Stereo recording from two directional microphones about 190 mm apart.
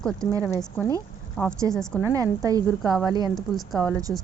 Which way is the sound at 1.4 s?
5° left (ahead or behind).